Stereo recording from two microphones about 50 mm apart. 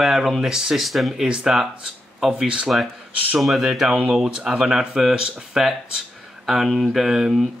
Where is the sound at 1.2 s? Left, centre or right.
Centre.